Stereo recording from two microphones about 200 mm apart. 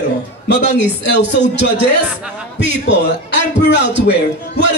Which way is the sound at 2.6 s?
60° left (ahead or behind).